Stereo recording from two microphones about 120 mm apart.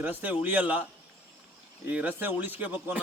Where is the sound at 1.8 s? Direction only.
15° right (ahead or behind).